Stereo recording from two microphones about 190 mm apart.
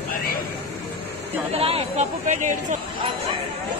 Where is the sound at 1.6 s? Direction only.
30° right (ahead or behind).